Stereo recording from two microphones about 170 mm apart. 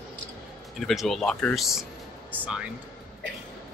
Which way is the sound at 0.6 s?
Centre (ahead or behind).